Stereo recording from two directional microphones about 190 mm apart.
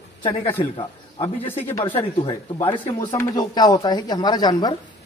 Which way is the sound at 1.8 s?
30° left (ahead or behind).